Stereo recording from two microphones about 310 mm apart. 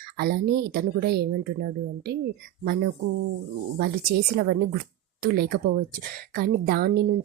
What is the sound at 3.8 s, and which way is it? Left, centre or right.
A woman's voice, right.